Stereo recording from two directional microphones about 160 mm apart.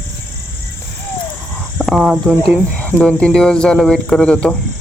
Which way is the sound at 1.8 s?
Centre (ahead or behind).